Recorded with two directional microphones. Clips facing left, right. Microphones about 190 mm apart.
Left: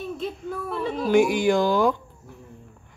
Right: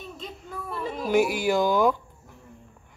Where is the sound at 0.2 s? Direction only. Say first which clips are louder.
Left 8 dB; 5° left (ahead or behind).